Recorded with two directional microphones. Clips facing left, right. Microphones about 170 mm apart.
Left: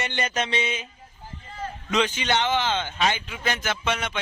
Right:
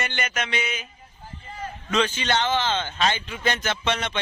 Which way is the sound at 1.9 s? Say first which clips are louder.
Even; 15° left (ahead or behind).